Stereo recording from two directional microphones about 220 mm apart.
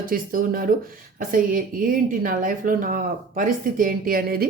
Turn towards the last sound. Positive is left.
turn(degrees=-40)  # may be behind; listen again after turning